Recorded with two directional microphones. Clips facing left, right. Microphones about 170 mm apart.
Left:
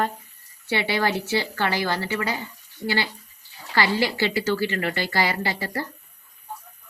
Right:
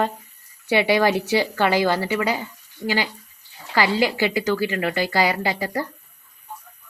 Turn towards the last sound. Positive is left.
turn(degrees=-15)  # may be behind; listen again after turning